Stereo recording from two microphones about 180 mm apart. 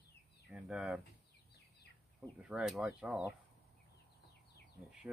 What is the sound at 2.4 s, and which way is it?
Speech, 5° right (ahead or behind).